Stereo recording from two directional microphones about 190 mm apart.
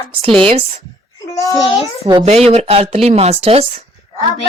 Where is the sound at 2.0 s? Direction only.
20° right (ahead or behind).